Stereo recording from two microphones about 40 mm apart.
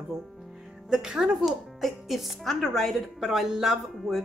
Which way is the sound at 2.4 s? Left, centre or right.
Centre.